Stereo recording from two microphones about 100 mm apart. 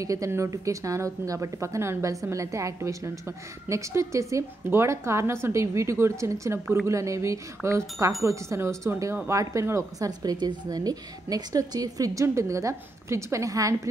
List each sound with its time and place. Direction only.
0.0 s speech: 35° right (ahead or behind)